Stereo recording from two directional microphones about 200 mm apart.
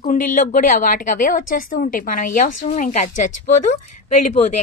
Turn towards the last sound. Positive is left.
turn(degrees=35)  # may be behind; listen again after turning